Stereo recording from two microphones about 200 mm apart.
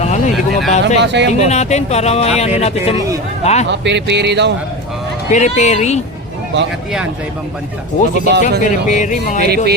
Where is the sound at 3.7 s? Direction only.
60° right (ahead or behind).